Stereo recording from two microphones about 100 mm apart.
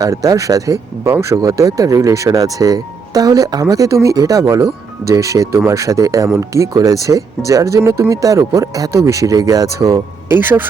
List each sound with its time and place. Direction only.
0.0 s speech: 35° right (ahead or behind)